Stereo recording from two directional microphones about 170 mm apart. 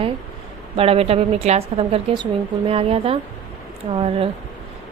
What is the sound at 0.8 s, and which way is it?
A woman's voice, 35° right (ahead or behind).